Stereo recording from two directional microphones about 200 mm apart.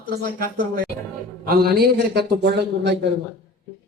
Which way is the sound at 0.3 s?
45° right (ahead or behind).